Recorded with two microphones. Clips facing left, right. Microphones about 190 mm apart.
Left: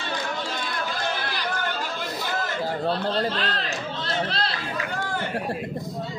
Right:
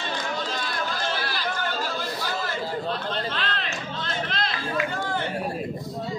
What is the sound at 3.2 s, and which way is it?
Speech, 35° left (ahead or behind).